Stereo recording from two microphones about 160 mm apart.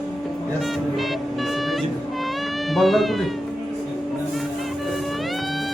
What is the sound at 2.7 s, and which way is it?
Speech, centre (ahead or behind).